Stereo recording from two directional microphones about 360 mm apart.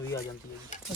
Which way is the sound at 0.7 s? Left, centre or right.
Left.